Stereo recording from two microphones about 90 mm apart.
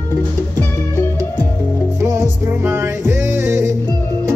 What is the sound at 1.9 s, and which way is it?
Music, 30° right (ahead or behind).